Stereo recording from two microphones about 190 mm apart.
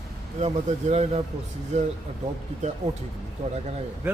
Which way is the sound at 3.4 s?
35° right (ahead or behind).